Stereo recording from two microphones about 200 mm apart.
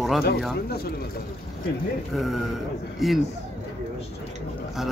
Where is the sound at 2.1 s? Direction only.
Centre (ahead or behind).